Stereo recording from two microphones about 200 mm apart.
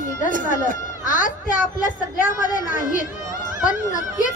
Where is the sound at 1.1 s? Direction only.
40° left (ahead or behind).